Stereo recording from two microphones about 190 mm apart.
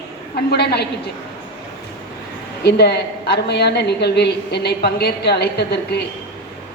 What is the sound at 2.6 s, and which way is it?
A woman's voice, 55° left (ahead or behind).